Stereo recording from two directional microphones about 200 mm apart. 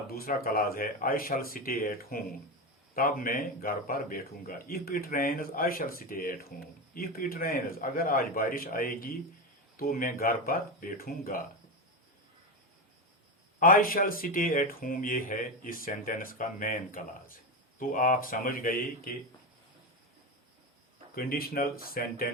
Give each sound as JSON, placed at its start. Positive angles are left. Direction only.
{"t": 0.1, "sound": "speech", "side_deg": 50}
{"t": 13.6, "sound": "speech", "side_deg": 45}
{"t": 21.2, "sound": "speech", "side_deg": 50}